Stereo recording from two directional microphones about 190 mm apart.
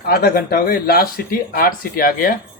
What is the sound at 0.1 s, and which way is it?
Speech, 50° left (ahead or behind).